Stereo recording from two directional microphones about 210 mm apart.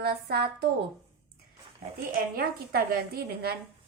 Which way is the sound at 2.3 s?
45° right (ahead or behind).